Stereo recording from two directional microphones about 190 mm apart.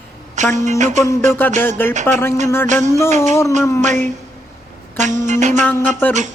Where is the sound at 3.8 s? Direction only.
40° right (ahead or behind).